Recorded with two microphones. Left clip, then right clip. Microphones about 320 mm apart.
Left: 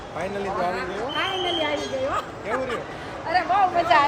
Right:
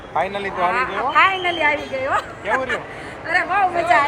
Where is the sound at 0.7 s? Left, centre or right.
Centre.